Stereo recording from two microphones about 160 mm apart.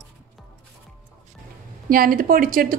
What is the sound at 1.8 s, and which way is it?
Speech, 65° right (ahead or behind).